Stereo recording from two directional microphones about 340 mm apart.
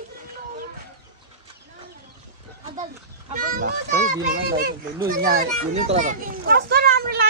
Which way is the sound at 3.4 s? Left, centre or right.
Right.